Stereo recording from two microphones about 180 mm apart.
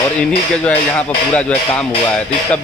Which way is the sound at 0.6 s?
5° left (ahead or behind).